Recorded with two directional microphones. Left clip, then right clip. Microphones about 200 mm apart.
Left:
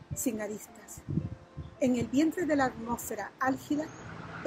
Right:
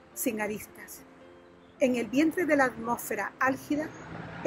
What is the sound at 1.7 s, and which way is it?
A woman's voice, centre (ahead or behind).